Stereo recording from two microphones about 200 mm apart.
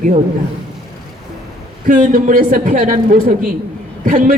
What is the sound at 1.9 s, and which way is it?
A woman's voice, 40° right (ahead or behind).